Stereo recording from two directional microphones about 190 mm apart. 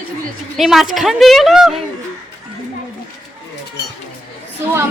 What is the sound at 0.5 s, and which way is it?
A woman's voice, centre (ahead or behind).